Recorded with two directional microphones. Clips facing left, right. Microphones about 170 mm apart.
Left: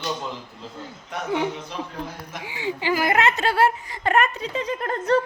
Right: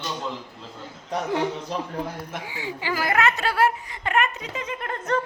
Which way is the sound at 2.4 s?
20° left (ahead or behind).